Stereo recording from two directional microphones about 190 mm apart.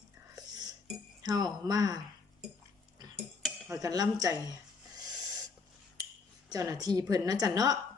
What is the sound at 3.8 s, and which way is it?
Speech, 20° right (ahead or behind).